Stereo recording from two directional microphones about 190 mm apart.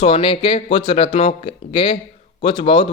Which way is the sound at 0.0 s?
30° left (ahead or behind).